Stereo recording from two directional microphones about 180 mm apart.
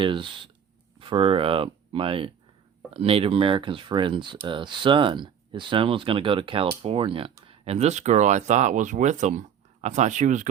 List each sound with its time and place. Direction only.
0.0 s speech: 25° right (ahead or behind); by 10.5 s 45° right (ahead or behind)